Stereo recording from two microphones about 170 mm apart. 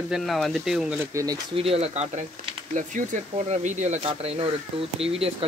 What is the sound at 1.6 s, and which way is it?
Speech, 35° right (ahead or behind).